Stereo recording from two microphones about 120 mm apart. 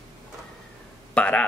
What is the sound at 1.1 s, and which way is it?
Speech, 10° left (ahead or behind).